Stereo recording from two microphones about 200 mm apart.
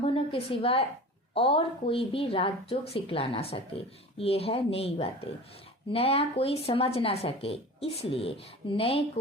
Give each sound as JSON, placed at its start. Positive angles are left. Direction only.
{"t": 0.0, "sound": "a woman's voice", "side_deg": 25}